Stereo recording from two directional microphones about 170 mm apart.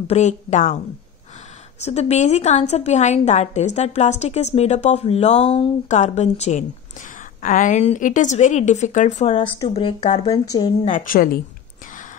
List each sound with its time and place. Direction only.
0.0 s a woman's voice: 40° left (ahead or behind)
1.8 s a woman's voice: 40° left (ahead or behind)
9.4 s speech: 30° left (ahead or behind)
10.9 s a woman's voice: 55° left (ahead or behind)